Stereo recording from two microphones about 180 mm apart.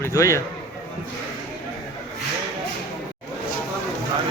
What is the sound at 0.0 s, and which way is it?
Speech, 15° left (ahead or behind).